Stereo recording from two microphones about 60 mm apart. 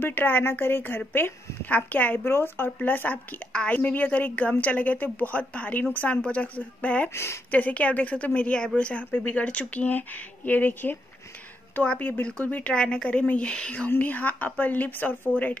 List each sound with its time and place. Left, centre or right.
0.0 s speech: left
2.2 s a woman's voice: left
7.1 s speech: left
7.5 s a woman's voice: left
13.8 s a woman's voice: left